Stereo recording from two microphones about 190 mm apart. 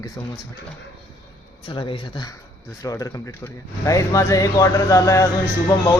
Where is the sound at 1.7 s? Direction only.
25° left (ahead or behind).